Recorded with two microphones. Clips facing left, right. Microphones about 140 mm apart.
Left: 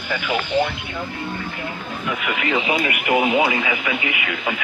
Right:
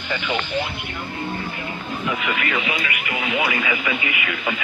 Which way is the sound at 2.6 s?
45° left (ahead or behind).